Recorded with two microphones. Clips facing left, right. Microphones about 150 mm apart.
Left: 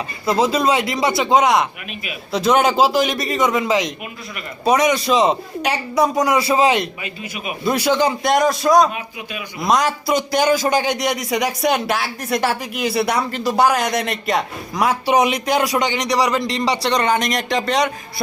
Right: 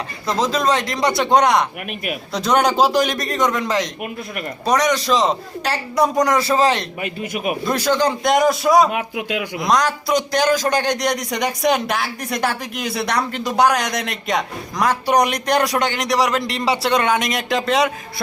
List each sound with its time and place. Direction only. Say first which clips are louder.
0.3 s a man's voice: left 2 dB; 10° left (ahead or behind)
7.0 s a man's voice: right 6 dB; 55° right (ahead or behind)
7.6 s a man's voice: left 3 dB; 5° left (ahead or behind)
8.9 s speech: right 7 dB; 75° right (ahead or behind)
9.6 s a man's voice: left 1 dB; 5° left (ahead or behind)